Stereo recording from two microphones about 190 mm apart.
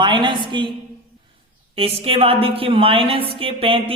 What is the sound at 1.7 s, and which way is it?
A woman's voice, 30° right (ahead or behind).